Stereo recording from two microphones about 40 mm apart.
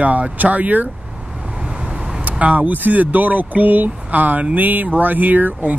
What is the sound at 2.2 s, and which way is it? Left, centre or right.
Speech, right.